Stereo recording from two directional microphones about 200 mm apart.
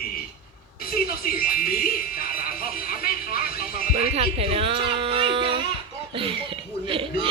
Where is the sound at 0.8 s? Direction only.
45° left (ahead or behind).